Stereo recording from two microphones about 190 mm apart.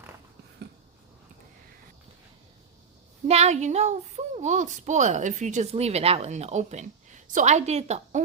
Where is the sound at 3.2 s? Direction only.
35° right (ahead or behind).